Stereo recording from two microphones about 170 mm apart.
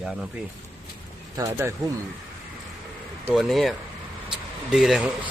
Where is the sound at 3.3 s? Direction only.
Centre (ahead or behind).